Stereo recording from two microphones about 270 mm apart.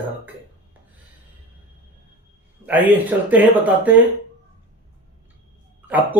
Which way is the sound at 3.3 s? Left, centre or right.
Centre.